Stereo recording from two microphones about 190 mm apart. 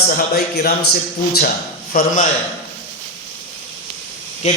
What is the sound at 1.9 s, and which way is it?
Speech, 40° left (ahead or behind).